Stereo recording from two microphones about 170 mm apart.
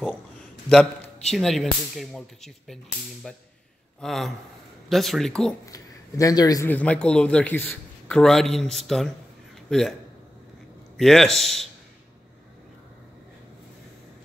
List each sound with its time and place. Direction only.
0.7 s a man's voice: centre (ahead or behind)
5.7 s a man's voice: 20° left (ahead or behind)
6.7 s a man's voice: 10° left (ahead or behind)
11.0 s a man's voice: centre (ahead or behind)